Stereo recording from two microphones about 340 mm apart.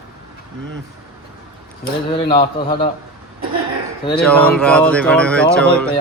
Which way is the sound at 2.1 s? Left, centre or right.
Centre.